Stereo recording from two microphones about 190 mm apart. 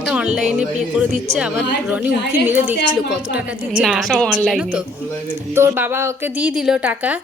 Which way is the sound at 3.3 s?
5° right (ahead or behind).